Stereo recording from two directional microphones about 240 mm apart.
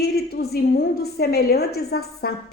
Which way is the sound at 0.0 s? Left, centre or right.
Left.